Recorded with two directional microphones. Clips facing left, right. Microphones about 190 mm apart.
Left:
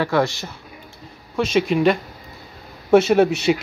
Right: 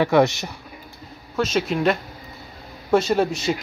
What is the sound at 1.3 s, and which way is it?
Speech, centre (ahead or behind).